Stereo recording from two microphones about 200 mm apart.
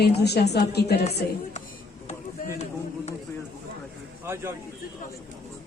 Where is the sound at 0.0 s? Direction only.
55° left (ahead or behind).